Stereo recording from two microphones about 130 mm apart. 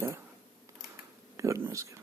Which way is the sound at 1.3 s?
25° right (ahead or behind).